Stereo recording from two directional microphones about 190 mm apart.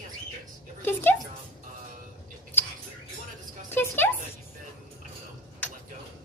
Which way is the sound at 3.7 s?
10° left (ahead or behind).